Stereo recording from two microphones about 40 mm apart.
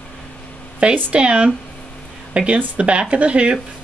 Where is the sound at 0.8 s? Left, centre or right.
Right.